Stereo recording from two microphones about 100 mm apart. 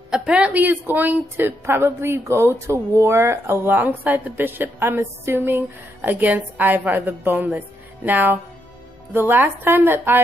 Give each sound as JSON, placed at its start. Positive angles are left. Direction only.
{"t": 0.1, "sound": "a woman's voice", "side_deg": -10}